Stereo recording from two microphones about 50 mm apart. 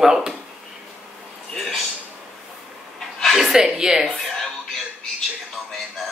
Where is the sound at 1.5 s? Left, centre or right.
Centre.